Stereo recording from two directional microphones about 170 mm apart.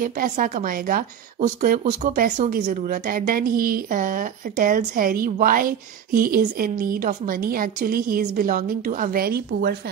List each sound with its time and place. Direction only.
0.0 s speech: 55° right (ahead or behind)